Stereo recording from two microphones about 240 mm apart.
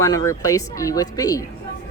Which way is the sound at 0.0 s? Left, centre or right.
Centre.